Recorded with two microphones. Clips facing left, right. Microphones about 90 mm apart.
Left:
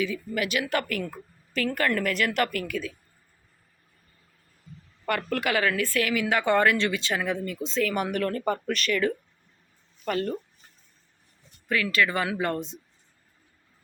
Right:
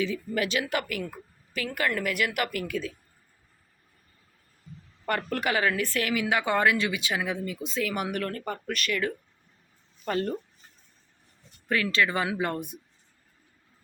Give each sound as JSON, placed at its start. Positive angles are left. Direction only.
{"t": 0.0, "sound": "speech", "side_deg": -30}
{"t": 0.7, "sound": "a woman's voice", "side_deg": -15}
{"t": 2.5, "sound": "speech", "side_deg": -25}
{"t": 5.0, "sound": "a woman's voice", "side_deg": -25}
{"t": 10.1, "sound": "speech", "side_deg": -25}
{"t": 11.7, "sound": "speech", "side_deg": -30}